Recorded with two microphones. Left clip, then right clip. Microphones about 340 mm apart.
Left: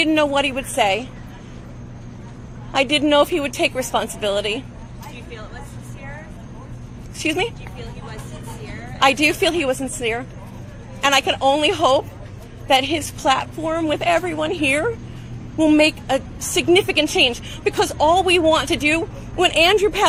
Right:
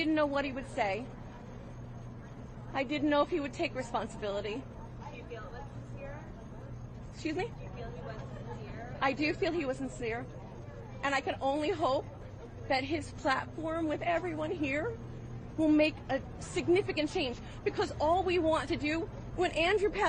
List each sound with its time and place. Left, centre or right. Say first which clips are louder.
0.0 s a woman's voice: left 13 dB; left
2.7 s a woman's voice: left 14 dB; left
9.0 s a woman's voice: left 16 dB; left